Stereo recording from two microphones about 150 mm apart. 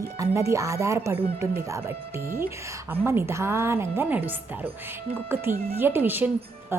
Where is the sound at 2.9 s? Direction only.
15° right (ahead or behind).